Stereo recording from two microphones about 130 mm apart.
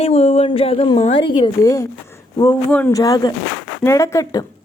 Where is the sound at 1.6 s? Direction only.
25° left (ahead or behind).